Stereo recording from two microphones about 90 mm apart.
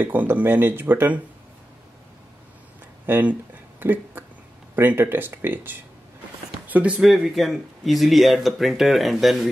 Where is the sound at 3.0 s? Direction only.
20° right (ahead or behind).